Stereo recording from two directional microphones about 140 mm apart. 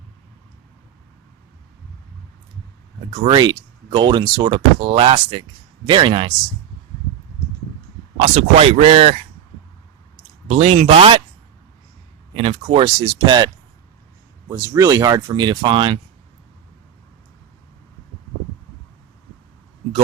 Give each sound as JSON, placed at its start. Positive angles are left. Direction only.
{"t": 3.2, "sound": "speech", "side_deg": -30}
{"t": 8.3, "sound": "speech", "side_deg": -50}
{"t": 10.5, "sound": "speech", "side_deg": -50}
{"t": 12.3, "sound": "speech", "side_deg": -40}
{"t": 14.5, "sound": "speech", "side_deg": -25}